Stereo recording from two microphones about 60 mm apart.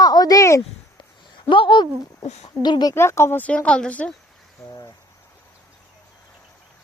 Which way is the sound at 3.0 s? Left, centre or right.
Left.